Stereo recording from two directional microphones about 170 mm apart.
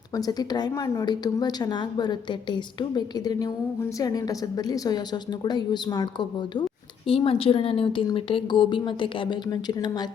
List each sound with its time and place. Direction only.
0.2 s a woman's voice: 20° left (ahead or behind)